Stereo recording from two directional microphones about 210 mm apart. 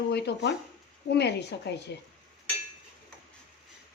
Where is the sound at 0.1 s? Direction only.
50° left (ahead or behind).